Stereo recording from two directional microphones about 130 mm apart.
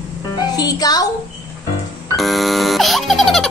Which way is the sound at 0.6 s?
30° left (ahead or behind).